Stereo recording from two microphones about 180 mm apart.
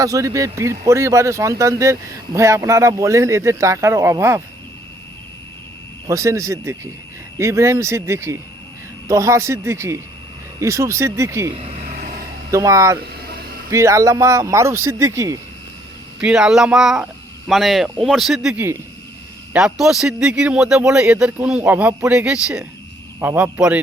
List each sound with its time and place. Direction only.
0.0 s speech: 20° right (ahead or behind)
6.1 s speech: 15° right (ahead or behind)
11.5 s speech: 35° right (ahead or behind)
11.9 s vehicle: 45° right (ahead or behind)
12.5 s speech: 15° right (ahead or behind)
16.2 s a man's voice: 5° right (ahead or behind)